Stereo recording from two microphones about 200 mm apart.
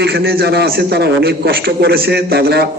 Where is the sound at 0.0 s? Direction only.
50° right (ahead or behind).